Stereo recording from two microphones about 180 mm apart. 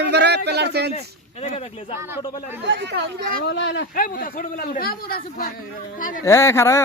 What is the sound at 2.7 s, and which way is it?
Speech, 70° right (ahead or behind).